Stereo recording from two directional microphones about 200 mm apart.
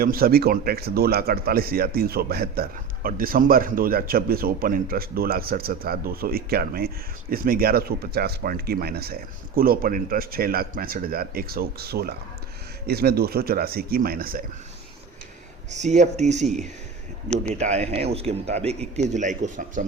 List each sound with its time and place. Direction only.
0.0 s speech: 50° right (ahead or behind)
15.7 s speech: 35° right (ahead or behind)
17.2 s speech: 5° left (ahead or behind)
17.5 s speech: 35° right (ahead or behind)